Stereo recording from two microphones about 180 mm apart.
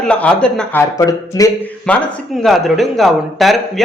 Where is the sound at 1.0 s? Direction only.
20° left (ahead or behind).